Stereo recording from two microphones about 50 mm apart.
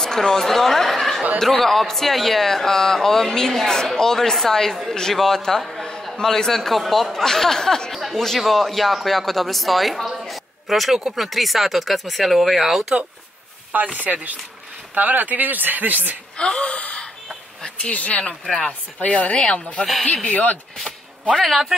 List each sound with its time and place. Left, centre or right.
0.0 s chatter: centre
1.4 s a man's voice: centre
6.1 s a man's voice: centre
13.7 s speech: right
16.3 s speech: centre
18.4 s a man's voice: centre
18.9 s a woman's voice: left
21.4 s a man's voice: centre